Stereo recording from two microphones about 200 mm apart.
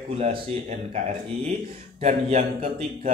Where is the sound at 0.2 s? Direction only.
35° right (ahead or behind).